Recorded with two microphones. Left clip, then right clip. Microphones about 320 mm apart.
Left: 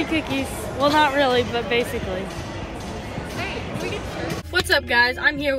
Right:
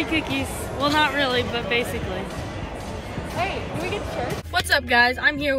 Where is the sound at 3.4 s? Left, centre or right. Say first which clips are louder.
Right 3 dB; right.